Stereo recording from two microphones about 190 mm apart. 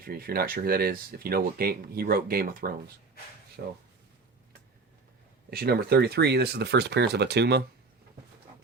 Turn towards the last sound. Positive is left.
turn(degrees=-60)  # may be behind; listen again after turning